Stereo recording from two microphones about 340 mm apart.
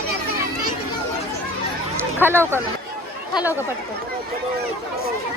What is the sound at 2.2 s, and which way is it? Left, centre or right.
Speech, centre.